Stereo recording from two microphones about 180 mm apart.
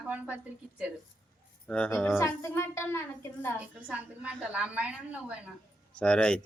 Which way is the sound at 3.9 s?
5° right (ahead or behind).